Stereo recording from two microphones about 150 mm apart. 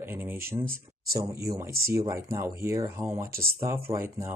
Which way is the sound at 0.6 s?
75° right (ahead or behind).